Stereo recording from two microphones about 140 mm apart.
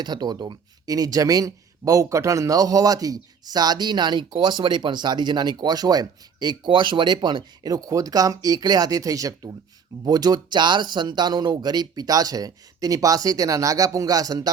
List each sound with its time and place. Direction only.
0.0 s speech: 30° right (ahead or behind)